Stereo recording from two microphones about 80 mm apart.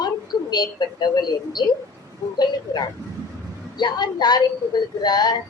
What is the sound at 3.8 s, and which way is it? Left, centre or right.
A woman's voice, left.